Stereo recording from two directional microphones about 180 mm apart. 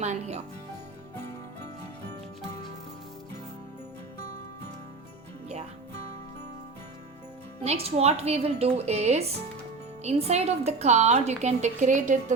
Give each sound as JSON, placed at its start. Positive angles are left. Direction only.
{"t": 0.0, "sound": "speech", "side_deg": -40}
{"t": 7.6, "sound": "speech", "side_deg": -35}